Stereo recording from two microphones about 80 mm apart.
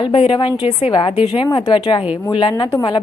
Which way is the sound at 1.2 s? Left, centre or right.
Left.